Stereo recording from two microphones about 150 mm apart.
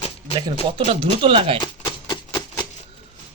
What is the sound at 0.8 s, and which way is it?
Speech, 40° right (ahead or behind).